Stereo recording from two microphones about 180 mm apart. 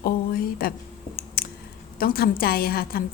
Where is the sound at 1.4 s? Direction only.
55° left (ahead or behind).